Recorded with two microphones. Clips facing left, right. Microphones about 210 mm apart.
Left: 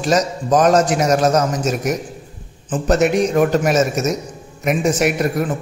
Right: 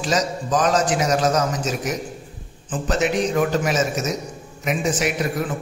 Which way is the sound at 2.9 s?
50° left (ahead or behind).